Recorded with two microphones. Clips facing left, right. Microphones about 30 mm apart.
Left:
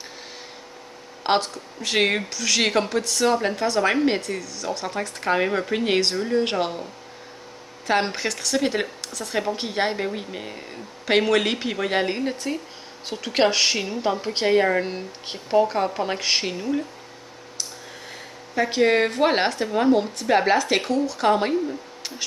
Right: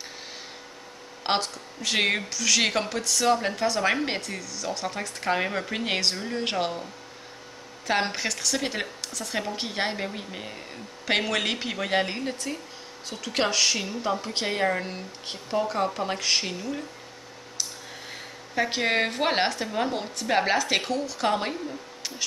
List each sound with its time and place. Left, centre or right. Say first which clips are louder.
1.2 s a woman's voice: left 5 dB; centre
18.1 s a woman's voice: left 3 dB; centre